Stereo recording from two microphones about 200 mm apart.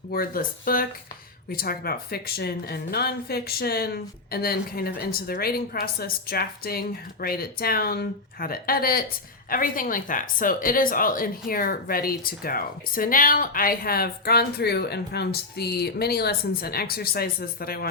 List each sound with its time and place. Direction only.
0.1 s a woman's voice: 45° left (ahead or behind)